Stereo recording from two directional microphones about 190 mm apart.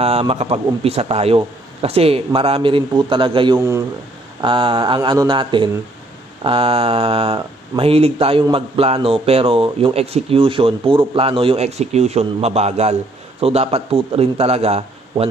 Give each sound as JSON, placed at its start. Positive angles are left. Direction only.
{"t": 0.0, "sound": "a man's voice", "side_deg": -30}
{"t": 3.5, "sound": "a man's voice", "side_deg": -15}
{"t": 4.4, "sound": "a man's voice", "side_deg": -25}